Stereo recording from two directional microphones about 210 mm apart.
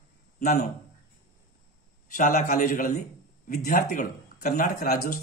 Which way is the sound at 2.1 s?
40° left (ahead or behind).